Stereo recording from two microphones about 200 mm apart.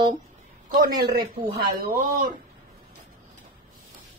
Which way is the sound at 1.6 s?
50° right (ahead or behind).